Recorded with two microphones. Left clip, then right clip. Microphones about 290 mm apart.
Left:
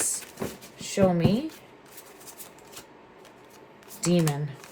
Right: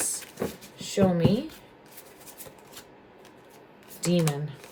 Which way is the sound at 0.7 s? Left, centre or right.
Centre.